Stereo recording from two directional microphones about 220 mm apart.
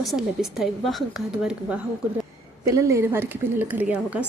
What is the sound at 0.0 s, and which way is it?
Speech, centre (ahead or behind).